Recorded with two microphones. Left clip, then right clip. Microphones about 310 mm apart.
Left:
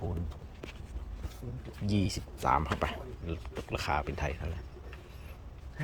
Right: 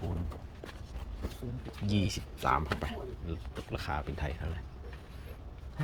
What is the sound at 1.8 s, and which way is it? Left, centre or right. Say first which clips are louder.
Speech: left 1 dB; centre.